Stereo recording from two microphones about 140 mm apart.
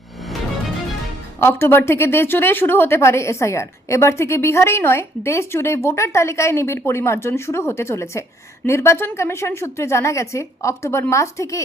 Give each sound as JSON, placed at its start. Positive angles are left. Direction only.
{"t": 1.4, "sound": "a woman's voice", "side_deg": 15}